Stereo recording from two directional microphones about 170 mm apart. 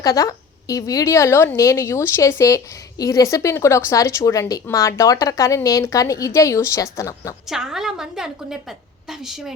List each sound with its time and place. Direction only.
0.0 s a woman's voice: 20° left (ahead or behind)
7.5 s a woman's voice: 5° right (ahead or behind)